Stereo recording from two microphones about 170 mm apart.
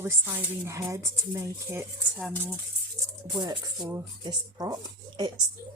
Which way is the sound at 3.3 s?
25° right (ahead or behind).